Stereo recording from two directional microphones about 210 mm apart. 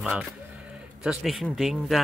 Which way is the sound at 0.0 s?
5° right (ahead or behind).